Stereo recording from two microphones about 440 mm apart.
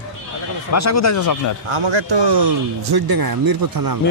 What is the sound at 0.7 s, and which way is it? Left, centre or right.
Speech, left.